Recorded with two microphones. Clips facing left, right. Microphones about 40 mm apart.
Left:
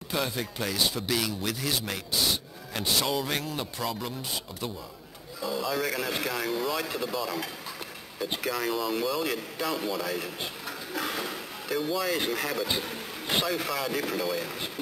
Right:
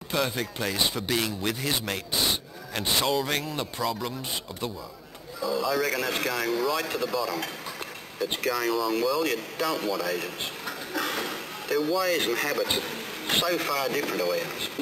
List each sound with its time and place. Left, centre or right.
0.1 s a man's voice: centre
3.3 s a man's voice: centre
5.5 s speech: centre
10.9 s a sound: centre
11.7 s speech: centre
12.6 s speech: centre
13.5 s speech: centre